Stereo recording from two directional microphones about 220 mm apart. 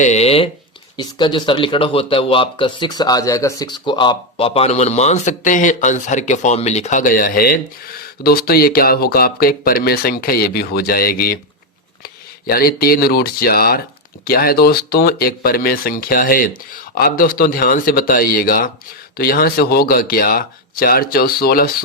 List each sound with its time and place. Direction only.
0.0 s speech: 30° left (ahead or behind)